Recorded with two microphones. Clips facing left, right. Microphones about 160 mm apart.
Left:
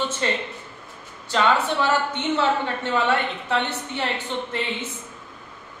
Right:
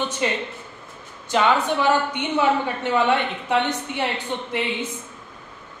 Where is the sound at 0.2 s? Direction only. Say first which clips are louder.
Right 1 dB; 15° right (ahead or behind).